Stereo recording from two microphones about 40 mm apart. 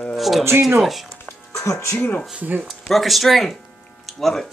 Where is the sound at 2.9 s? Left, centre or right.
Centre.